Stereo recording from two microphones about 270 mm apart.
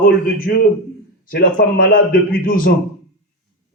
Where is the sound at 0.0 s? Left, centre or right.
Left.